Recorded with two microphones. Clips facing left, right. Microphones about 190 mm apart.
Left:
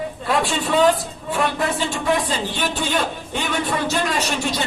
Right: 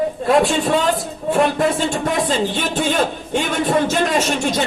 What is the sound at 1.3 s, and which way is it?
Speech, 45° right (ahead or behind).